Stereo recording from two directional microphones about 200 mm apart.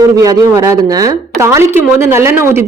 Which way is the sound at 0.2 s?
15° right (ahead or behind).